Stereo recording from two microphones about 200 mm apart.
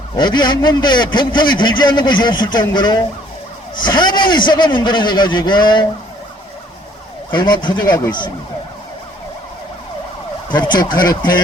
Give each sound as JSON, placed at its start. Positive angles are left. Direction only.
{"t": 0.2, "sound": "a man's voice", "side_deg": 20}
{"t": 7.3, "sound": "a man's voice", "side_deg": 25}
{"t": 10.5, "sound": "a man's voice", "side_deg": 20}